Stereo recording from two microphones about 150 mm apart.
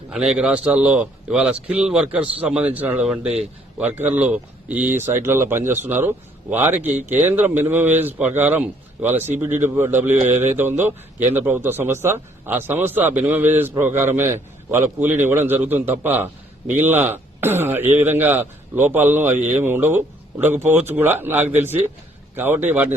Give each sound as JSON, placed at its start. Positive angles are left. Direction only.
{"t": 0.1, "sound": "a man's voice", "side_deg": -5}
{"t": 9.1, "sound": "speech", "side_deg": -50}
{"t": 9.6, "sound": "a man's voice", "side_deg": -15}